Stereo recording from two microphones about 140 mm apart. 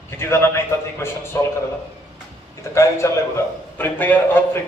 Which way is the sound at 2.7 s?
20° left (ahead or behind).